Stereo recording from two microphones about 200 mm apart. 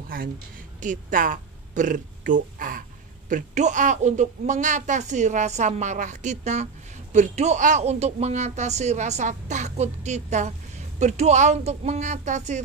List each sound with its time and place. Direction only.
0.7 s a woman's voice: 40° right (ahead or behind)